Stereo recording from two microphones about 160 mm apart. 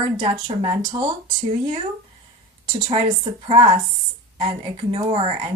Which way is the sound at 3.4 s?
35° right (ahead or behind).